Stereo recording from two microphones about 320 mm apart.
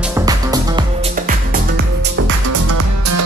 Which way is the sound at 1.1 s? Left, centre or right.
Right.